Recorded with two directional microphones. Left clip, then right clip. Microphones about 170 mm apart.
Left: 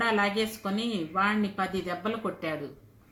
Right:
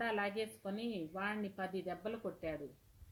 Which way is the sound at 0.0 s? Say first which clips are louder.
Left 12 dB; 40° right (ahead or behind).